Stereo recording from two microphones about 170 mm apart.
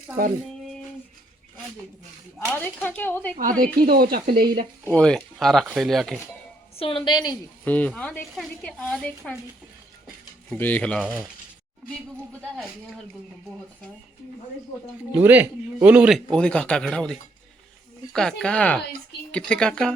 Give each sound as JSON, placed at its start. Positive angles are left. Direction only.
{"t": 2.5, "sound": "speech", "side_deg": 10}
{"t": 3.6, "sound": "speech", "side_deg": -60}
{"t": 4.9, "sound": "a man's voice", "side_deg": 5}
{"t": 6.7, "sound": "a woman's voice", "side_deg": 30}
{"t": 7.6, "sound": "speech", "side_deg": 10}
{"t": 10.5, "sound": "speech", "side_deg": 10}
{"t": 11.0, "sound": "a man's voice", "side_deg": -5}
{"t": 15.1, "sound": "a man's voice", "side_deg": -10}